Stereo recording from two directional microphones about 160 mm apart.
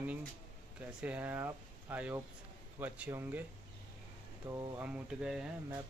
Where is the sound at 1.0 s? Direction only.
10° right (ahead or behind).